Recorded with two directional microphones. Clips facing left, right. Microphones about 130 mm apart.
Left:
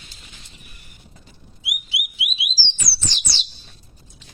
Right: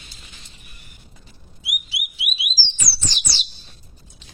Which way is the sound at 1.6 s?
20° left (ahead or behind).